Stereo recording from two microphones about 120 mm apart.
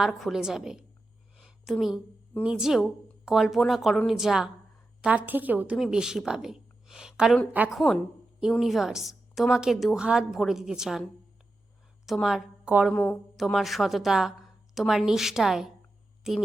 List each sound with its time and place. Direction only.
0.0 s a woman's voice: centre (ahead or behind)
1.4 s a sound: centre (ahead or behind)
2.4 s a woman's voice: 5° right (ahead or behind)
12.9 s speech: 15° left (ahead or behind)
13.3 s a woman's voice: centre (ahead or behind)